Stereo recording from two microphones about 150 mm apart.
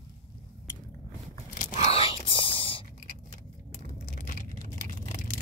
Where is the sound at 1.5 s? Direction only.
45° left (ahead or behind).